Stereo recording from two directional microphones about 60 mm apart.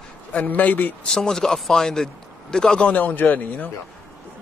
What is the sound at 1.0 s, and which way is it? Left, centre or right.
Speech, centre.